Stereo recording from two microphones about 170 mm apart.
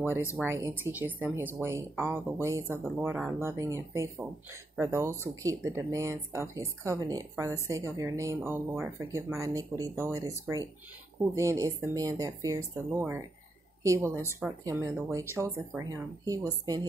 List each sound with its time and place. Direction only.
0.4 s speech: 15° right (ahead or behind)